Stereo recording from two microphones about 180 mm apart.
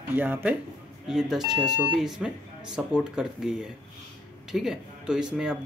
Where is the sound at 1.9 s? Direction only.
5° right (ahead or behind).